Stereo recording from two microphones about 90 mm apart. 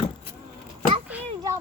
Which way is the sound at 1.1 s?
15° right (ahead or behind).